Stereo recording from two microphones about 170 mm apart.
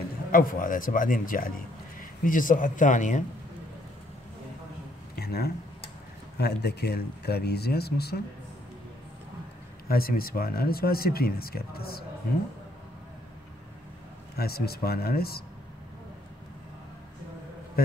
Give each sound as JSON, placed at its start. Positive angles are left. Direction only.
{"t": 0.3, "sound": "speech", "side_deg": 55}
{"t": 5.2, "sound": "a sound", "side_deg": 70}
{"t": 6.3, "sound": "speech", "side_deg": 75}
{"t": 9.8, "sound": "speech", "side_deg": 60}
{"t": 14.3, "sound": "speech", "side_deg": 65}
{"t": 17.8, "sound": "speech", "side_deg": 60}